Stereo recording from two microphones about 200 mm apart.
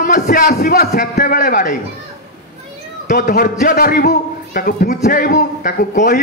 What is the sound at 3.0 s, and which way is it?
A man's voice, 45° left (ahead or behind).